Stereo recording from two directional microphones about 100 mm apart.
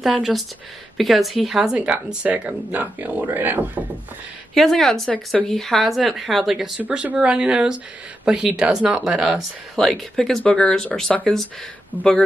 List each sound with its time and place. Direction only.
0.0 s speech: centre (ahead or behind); by 3.8 s 15° right (ahead or behind)
4.6 s speech: 5° left (ahead or behind)
6.8 s speech: 15° right (ahead or behind); by 11.4 s 5° left (ahead or behind)
11.9 s speech: 20° right (ahead or behind)